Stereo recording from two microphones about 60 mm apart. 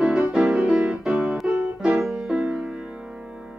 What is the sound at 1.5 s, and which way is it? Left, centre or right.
Music, right.